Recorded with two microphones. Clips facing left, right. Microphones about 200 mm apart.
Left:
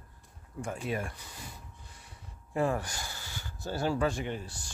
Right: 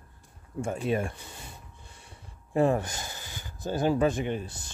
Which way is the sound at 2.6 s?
25° right (ahead or behind).